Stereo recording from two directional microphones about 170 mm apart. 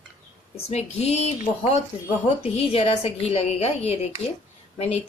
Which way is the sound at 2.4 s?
35° left (ahead or behind).